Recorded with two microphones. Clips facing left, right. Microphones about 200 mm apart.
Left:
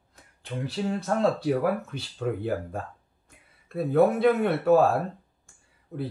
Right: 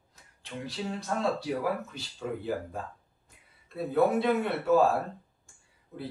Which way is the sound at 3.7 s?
55° left (ahead or behind).